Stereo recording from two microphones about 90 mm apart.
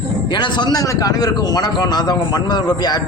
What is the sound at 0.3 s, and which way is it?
A man's voice, 55° left (ahead or behind).